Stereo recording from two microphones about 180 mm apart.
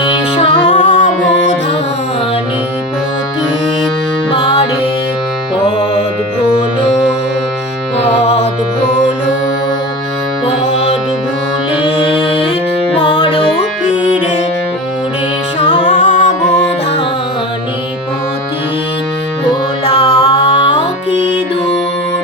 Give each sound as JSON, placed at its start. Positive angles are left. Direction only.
{"t": 0.3, "sound": "music", "side_deg": 45}
{"t": 8.9, "sound": "music", "side_deg": 45}
{"t": 13.0, "sound": "music", "side_deg": 25}
{"t": 16.0, "sound": "music", "side_deg": 45}
{"t": 20.0, "sound": "music", "side_deg": 30}